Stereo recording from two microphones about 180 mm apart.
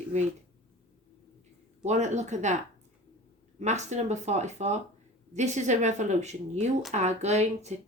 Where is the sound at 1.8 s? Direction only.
40° right (ahead or behind).